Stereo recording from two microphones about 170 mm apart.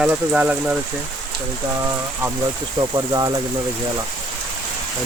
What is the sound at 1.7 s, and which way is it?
Speech, 20° right (ahead or behind).